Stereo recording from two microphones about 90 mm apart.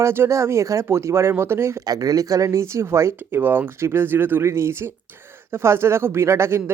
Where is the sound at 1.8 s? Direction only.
45° right (ahead or behind).